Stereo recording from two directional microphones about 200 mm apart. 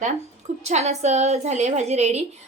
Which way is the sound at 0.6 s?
35° right (ahead or behind).